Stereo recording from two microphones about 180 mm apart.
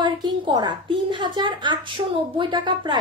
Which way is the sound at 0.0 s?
25° right (ahead or behind).